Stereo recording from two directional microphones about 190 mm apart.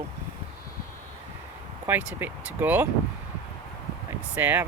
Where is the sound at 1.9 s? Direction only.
10° right (ahead or behind).